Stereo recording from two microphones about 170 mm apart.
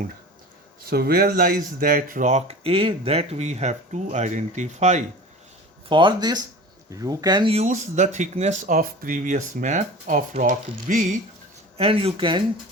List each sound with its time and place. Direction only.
0.9 s speech: 65° right (ahead or behind); by 5.0 s 45° right (ahead or behind)
5.9 s speech: 30° right (ahead or behind)
7.5 s speech: 45° right (ahead or behind)
11.8 s speech: 35° right (ahead or behind)